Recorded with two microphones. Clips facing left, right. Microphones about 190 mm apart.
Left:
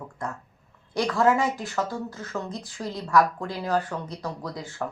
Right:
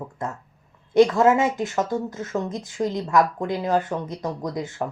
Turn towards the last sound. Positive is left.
turn(degrees=-20)  # may be behind; listen again after turning